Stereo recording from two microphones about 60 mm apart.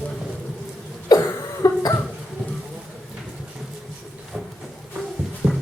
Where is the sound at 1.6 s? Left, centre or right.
Left.